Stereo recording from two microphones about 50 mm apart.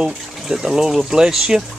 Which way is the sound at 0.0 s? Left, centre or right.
Centre.